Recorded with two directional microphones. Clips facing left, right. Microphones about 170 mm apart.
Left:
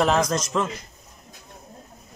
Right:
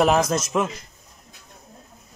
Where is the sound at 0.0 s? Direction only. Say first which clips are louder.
Right 2 dB; 10° right (ahead or behind).